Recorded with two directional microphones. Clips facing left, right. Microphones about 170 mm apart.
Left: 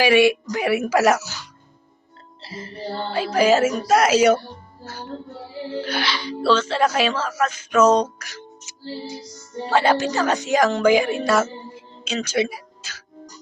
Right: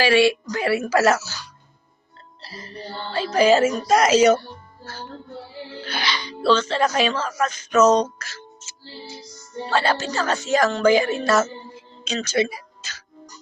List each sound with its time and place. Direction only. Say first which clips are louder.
0.0 s speech: left 1 dB; 15° left (ahead or behind)
5.8 s speech: even; 5° left (ahead or behind)
8.2 s music: left 1 dB; 15° left (ahead or behind)
9.6 s speech: left 4 dB; 15° left (ahead or behind)